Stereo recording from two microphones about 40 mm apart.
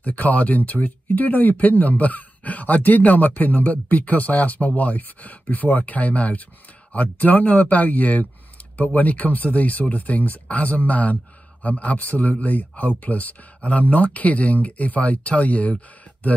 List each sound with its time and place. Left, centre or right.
0.0 s speech: left